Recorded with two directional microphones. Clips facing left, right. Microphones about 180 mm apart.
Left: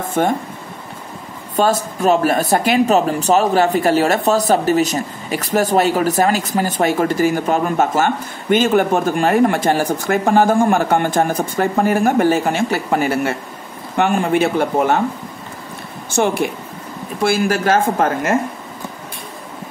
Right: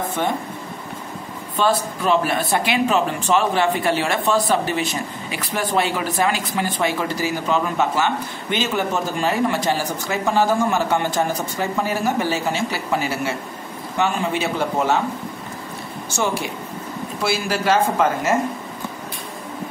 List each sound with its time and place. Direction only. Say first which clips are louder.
0.1 s speech: left 9 dB; 45° left (ahead or behind)
1.6 s speech: left 4 dB; 45° left (ahead or behind)
16.1 s speech: left 6 dB; 55° left (ahead or behind)